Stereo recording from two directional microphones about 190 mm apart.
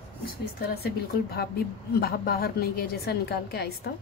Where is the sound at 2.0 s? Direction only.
55° left (ahead or behind).